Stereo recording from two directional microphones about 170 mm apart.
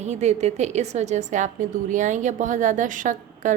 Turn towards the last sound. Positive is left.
turn(degrees=-50)  # may be behind; listen again after turning